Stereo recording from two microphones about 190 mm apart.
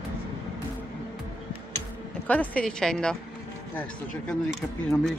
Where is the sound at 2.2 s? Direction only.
5° left (ahead or behind).